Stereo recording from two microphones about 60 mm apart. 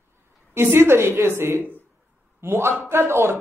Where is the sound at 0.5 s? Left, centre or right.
Right.